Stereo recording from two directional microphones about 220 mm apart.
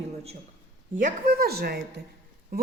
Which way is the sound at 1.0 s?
45° right (ahead or behind).